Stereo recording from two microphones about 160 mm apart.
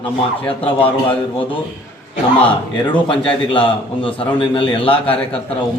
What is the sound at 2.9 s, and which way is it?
A man's voice, 35° left (ahead or behind).